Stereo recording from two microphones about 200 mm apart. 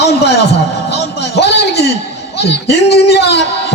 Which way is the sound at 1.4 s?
55° left (ahead or behind).